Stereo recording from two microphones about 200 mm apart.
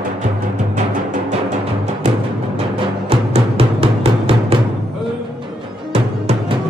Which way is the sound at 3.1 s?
30° right (ahead or behind).